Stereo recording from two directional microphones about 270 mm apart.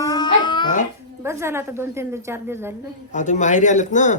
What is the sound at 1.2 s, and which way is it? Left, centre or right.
A woman's voice, centre.